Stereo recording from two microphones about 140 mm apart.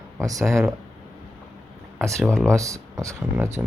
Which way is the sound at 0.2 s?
20° right (ahead or behind).